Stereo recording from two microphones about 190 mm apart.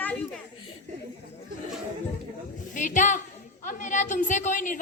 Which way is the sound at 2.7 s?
40° left (ahead or behind).